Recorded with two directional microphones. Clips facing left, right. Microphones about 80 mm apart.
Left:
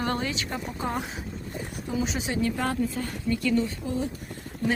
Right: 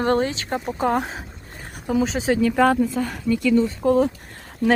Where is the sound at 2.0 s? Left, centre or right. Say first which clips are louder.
Right 9 dB; right.